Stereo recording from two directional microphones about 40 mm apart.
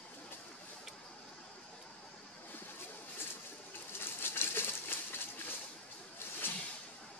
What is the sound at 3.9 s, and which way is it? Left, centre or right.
Bird, left.